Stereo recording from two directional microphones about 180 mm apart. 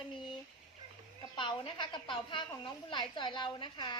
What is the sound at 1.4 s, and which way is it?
Speech, 30° left (ahead or behind).